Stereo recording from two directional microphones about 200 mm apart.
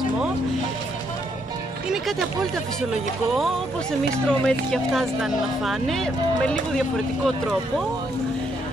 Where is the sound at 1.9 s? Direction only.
Centre (ahead or behind).